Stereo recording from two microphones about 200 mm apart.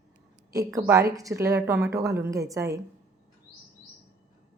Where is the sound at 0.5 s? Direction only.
15° right (ahead or behind).